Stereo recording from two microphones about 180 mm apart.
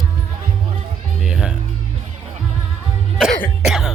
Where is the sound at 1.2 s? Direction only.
5° right (ahead or behind).